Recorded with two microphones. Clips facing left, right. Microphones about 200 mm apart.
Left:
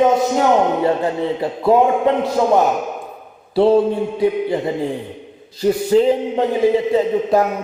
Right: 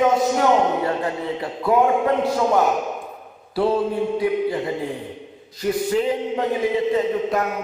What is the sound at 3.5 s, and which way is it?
A man's voice, 25° left (ahead or behind).